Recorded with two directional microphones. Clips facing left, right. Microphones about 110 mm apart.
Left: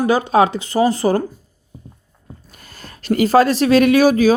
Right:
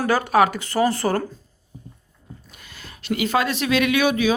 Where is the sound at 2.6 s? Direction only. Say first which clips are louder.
Left 3 dB; 45° left (ahead or behind).